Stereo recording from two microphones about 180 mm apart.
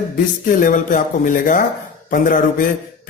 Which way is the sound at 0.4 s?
50° left (ahead or behind).